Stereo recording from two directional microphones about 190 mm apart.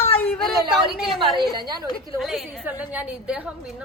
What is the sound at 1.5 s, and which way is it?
Speech, 20° right (ahead or behind).